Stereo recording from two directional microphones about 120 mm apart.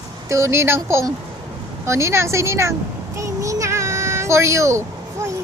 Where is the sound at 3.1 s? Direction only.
25° right (ahead or behind).